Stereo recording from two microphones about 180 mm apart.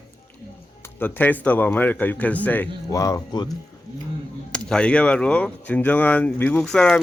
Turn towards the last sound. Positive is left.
turn(degrees=5)  # may be behind; listen again after turning